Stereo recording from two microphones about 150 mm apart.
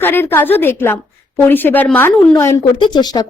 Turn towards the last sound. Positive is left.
turn(degrees=25)  # may be behind; listen again after turning